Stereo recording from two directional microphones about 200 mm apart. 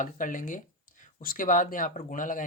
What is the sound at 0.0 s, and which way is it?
Speech, 40° left (ahead or behind).